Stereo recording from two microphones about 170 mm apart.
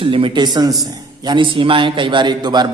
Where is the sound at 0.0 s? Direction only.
30° right (ahead or behind).